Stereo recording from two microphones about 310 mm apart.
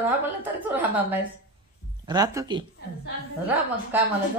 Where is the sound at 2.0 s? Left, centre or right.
Centre.